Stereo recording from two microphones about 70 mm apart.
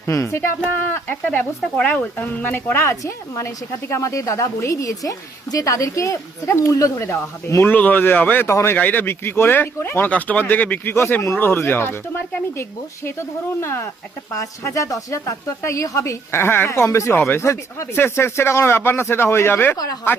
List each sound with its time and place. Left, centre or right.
0.0 s a woman's voice: left
0.9 s speech: left
2.8 s a woman's voice: left
7.0 s speech: left
7.6 s speech: left
8.4 s speech: left
8.7 s speech: left
11.3 s speech: left
13.1 s speech: left
14.3 s a woman's voice: left
16.3 s speech: left
17.4 s a woman's voice: left
17.9 s speech: left
19.7 s speech: left